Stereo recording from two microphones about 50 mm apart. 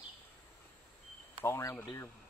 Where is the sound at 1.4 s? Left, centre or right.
Left.